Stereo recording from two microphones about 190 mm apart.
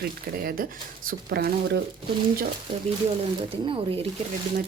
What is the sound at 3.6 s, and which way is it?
Speech, 30° right (ahead or behind).